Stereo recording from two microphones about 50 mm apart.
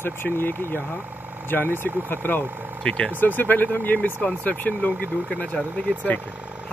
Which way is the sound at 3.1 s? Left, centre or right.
Left.